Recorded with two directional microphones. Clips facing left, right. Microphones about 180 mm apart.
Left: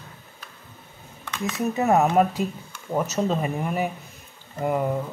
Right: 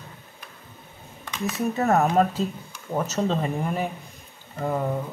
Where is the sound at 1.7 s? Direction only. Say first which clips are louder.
Left 1 dB; 15° left (ahead or behind).